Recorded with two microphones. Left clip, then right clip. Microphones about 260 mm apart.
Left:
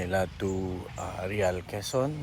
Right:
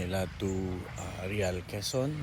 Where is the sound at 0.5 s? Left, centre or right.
Left.